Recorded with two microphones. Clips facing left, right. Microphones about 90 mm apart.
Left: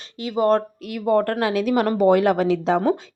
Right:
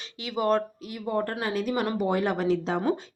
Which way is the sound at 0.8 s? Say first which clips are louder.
Left 9 dB; 65° left (ahead or behind).